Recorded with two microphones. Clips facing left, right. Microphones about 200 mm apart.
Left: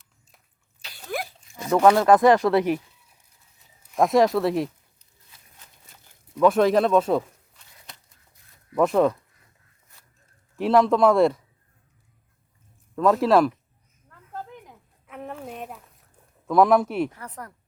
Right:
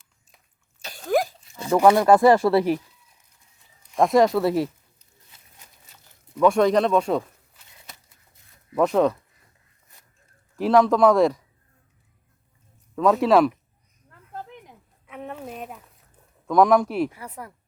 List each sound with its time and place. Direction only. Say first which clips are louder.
0.8 s sneeze: right 9 dB; 45° right (ahead or behind)
1.7 s speech: right 1 dB; 15° right (ahead or behind)
3.9 s speech: right 1 dB; centre (ahead or behind)
6.3 s tearing: even; centre (ahead or behind)
8.7 s speech: even; centre (ahead or behind)
10.6 s speech: right 1 dB; centre (ahead or behind)
13.0 s speech: right 1 dB; centre (ahead or behind)
15.0 s a sound: right 1 dB; centre (ahead or behind)
16.5 s speech: right 1 dB; 5° left (ahead or behind)